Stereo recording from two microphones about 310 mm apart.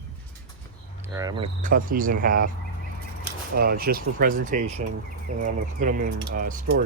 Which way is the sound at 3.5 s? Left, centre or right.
Right.